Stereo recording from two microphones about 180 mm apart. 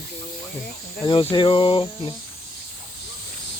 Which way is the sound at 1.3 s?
25° left (ahead or behind).